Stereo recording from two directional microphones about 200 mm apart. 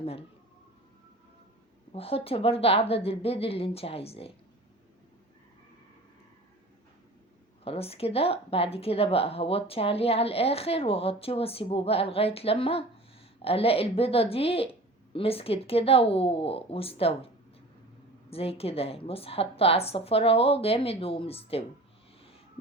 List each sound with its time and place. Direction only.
0.0 s a sound: 30° left (ahead or behind)
1.9 s speech: 30° left (ahead or behind)
7.6 s speech: 30° left (ahead or behind)
18.3 s speech: 30° left (ahead or behind)